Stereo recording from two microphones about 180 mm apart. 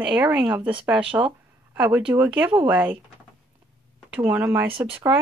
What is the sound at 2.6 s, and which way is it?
Speech, 10° right (ahead or behind).